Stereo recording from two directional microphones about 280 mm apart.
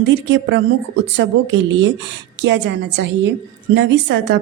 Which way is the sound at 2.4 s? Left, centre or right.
Right.